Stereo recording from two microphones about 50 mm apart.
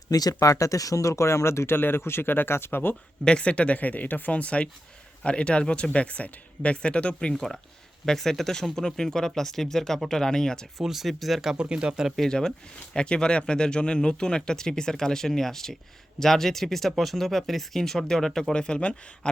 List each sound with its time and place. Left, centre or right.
0.3 s speech: left
3.2 s speech: left
10.8 s speech: centre
12.3 s speech: centre
18.5 s speech: centre